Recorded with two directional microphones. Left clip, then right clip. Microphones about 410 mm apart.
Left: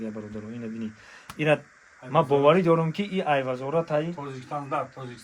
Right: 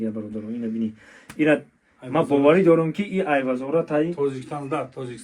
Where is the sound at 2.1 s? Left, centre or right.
Centre.